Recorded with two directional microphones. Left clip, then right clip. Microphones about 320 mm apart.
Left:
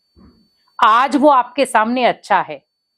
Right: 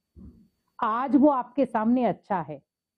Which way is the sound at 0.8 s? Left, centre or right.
Centre.